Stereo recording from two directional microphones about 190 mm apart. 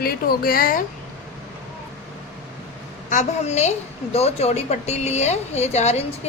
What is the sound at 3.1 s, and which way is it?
A woman's voice, 40° left (ahead or behind).